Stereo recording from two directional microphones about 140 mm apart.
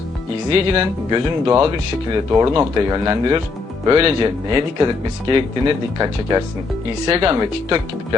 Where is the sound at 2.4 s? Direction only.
20° right (ahead or behind).